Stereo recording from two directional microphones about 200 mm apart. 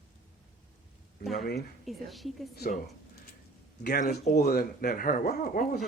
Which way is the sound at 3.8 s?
50° left (ahead or behind).